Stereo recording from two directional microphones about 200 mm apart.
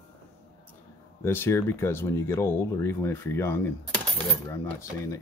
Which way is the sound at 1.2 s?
10° left (ahead or behind).